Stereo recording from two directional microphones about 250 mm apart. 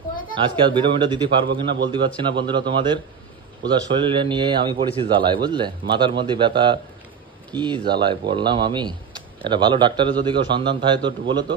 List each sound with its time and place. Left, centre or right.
0.2 s a man's voice: centre